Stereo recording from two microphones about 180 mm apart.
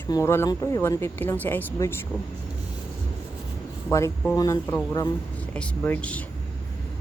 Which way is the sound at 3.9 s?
15° left (ahead or behind).